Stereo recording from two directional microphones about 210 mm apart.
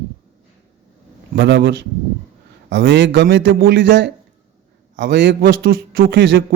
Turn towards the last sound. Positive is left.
turn(degrees=-60)  # may be behind; listen again after turning